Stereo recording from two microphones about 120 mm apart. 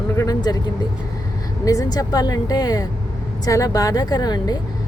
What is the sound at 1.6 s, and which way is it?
A woman's voice, 30° left (ahead or behind).